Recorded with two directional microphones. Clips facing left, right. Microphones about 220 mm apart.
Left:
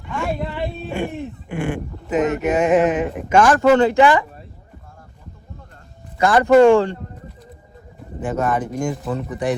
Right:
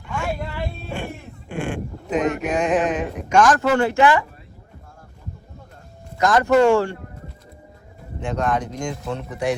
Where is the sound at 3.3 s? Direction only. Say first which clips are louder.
Left 1 dB; 10° left (ahead or behind).